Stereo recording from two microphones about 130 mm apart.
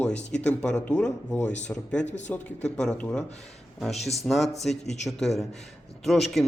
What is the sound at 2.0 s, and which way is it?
Speech, 65° left (ahead or behind).